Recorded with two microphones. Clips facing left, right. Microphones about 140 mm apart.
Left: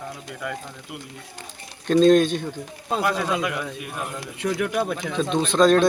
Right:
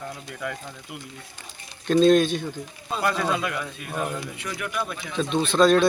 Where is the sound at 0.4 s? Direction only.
Centre (ahead or behind).